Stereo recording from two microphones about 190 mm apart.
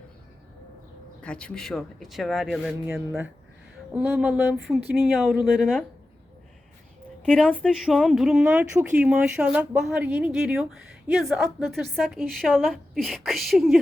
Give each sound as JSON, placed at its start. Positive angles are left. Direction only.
{"t": 1.2, "sound": "a woman's voice", "side_deg": 5}
{"t": 3.9, "sound": "a sound", "side_deg": -5}
{"t": 4.5, "sound": "a woman's voice", "side_deg": 0}
{"t": 7.3, "sound": "a woman's voice", "side_deg": 0}